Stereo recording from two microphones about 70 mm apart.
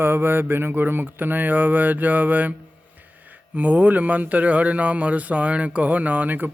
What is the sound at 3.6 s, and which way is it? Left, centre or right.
Speech, right.